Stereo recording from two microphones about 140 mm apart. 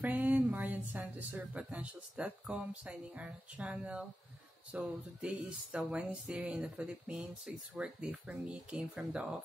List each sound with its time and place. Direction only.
0.0 s speech: 10° right (ahead or behind)